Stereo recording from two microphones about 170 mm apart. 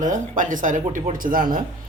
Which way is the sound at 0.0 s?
50° right (ahead or behind).